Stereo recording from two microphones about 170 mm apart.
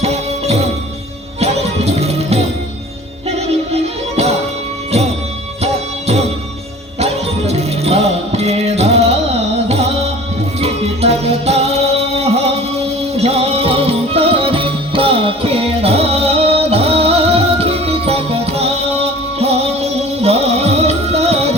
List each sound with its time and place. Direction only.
0.0 s music: 40° right (ahead or behind)
7.0 s music: 40° right (ahead or behind)
10.6 s music: 35° right (ahead or behind)